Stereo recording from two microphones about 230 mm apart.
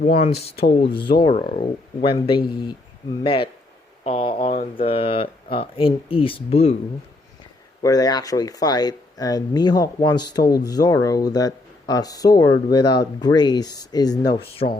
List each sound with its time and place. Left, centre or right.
0.0 s speech: left
7.8 s speech: centre